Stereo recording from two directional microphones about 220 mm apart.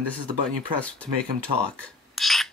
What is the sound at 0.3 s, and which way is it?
Speech, 5° left (ahead or behind).